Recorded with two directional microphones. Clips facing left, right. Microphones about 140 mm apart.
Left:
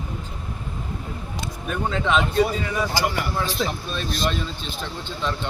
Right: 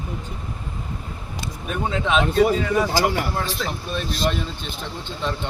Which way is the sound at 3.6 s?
20° left (ahead or behind).